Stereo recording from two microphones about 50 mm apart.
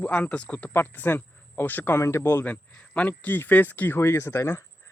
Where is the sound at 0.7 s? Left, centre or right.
Left.